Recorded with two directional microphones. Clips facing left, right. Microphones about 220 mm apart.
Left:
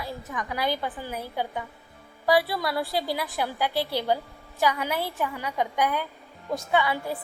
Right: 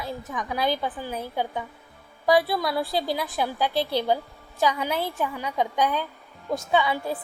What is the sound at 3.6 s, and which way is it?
Speech, 10° left (ahead or behind).